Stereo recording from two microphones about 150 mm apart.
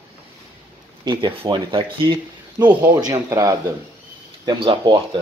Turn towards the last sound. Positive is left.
turn(degrees=-35)  # may be behind; listen again after turning